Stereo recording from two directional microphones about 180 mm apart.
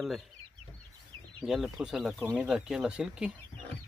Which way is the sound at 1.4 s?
Centre (ahead or behind).